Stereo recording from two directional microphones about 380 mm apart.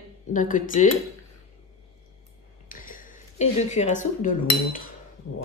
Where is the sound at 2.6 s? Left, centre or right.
Left.